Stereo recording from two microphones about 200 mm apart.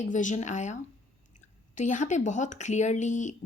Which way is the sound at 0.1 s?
40° left (ahead or behind).